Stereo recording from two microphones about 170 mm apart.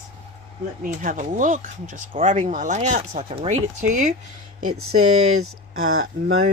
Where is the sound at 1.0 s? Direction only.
50° right (ahead or behind).